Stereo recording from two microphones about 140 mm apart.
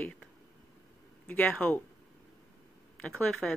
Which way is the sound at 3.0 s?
10° left (ahead or behind).